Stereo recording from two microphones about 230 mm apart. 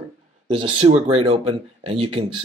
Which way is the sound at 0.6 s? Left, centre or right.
Right.